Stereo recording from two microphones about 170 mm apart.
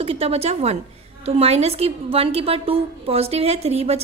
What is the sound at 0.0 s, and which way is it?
A woman's voice, 35° right (ahead or behind).